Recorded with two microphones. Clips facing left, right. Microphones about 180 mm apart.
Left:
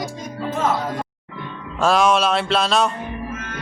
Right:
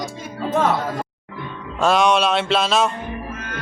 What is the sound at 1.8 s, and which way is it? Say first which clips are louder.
Music: even; centre (ahead or behind).